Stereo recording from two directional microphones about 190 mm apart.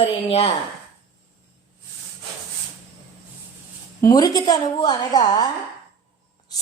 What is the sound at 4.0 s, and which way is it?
A woman's voice, 20° left (ahead or behind).